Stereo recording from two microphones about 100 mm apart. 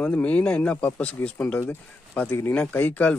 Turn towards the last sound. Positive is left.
turn(degrees=15)  # may be behind; listen again after turning